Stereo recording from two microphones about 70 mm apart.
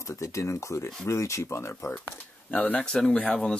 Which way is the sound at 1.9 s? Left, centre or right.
Left.